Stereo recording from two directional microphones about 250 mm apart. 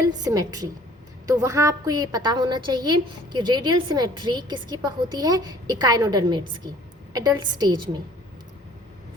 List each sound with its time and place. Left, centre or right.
0.1 s a woman's voice: centre